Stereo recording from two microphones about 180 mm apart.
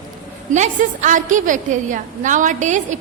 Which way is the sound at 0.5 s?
45° right (ahead or behind).